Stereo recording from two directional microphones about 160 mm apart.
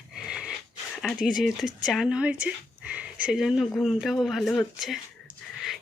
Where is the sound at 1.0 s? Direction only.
5° right (ahead or behind).